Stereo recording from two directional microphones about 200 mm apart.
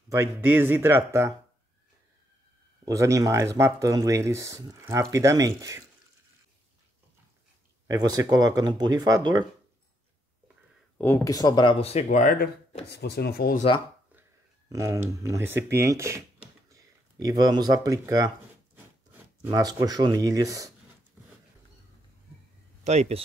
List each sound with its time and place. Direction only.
0.1 s speech: 10° right (ahead or behind)
2.8 s speech: 15° right (ahead or behind)
7.8 s speech: 20° right (ahead or behind)
11.0 s speech: 10° left (ahead or behind); by 12.4 s 40° left (ahead or behind)
12.9 s speech: 55° left (ahead or behind)
14.7 s speech: 15° right (ahead or behind)
19.4 s speech: 15° right (ahead or behind)
22.8 s speech: 35° right (ahead or behind)